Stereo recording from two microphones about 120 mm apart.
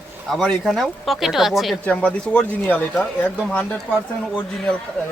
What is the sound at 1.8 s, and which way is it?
Speech, 10° left (ahead or behind).